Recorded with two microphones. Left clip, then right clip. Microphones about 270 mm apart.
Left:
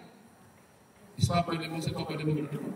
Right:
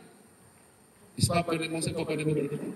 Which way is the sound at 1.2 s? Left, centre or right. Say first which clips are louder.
Right 2 dB; right.